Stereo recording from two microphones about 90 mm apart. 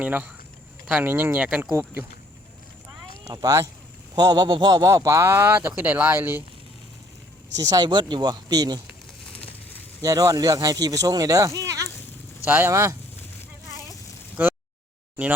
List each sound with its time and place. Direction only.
0.0 s speech: 15° right (ahead or behind)
1.7 s speech: 25° right (ahead or behind)
3.2 s speech: 45° right (ahead or behind)
4.9 s speech: 35° right (ahead or behind)
7.5 s speech: 45° right (ahead or behind)
10.0 s speech: 40° right (ahead or behind)
12.5 s speech: 25° right (ahead or behind)
14.4 s a sound: 25° right (ahead or behind)